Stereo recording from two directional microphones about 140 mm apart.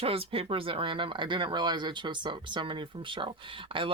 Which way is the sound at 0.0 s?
45° right (ahead or behind).